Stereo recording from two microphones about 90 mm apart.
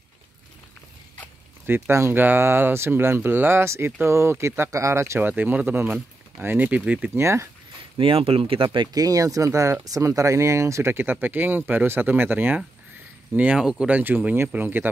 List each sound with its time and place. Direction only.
1.7 s speech: 30° right (ahead or behind)
5.3 s speech: 20° right (ahead or behind)
7.2 s speech: 30° right (ahead or behind)
8.0 s speech: 90° right
8.9 s speech: 45° right (ahead or behind); by 13.9 s 10° right (ahead or behind)
13.9 s speech: 20° right (ahead or behind)